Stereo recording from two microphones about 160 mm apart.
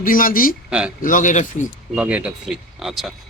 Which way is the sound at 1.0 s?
55° left (ahead or behind).